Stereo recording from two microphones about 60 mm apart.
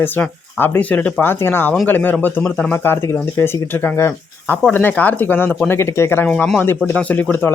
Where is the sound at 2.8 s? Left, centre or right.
Left.